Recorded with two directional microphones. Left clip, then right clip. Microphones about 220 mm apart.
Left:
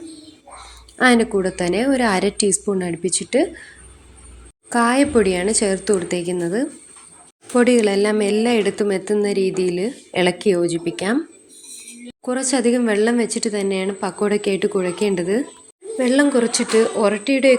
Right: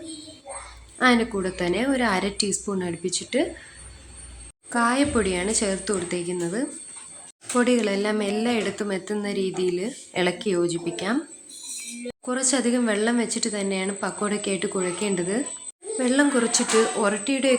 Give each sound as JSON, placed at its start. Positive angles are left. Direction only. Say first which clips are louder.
{"t": 0.9, "sound": "a woman's voice", "louder": "left 5 dB", "side_deg": 20}
{"t": 4.7, "sound": "a woman's voice", "louder": "left 6 dB", "side_deg": 20}
{"t": 12.2, "sound": "a woman's voice", "louder": "left 5 dB", "side_deg": 15}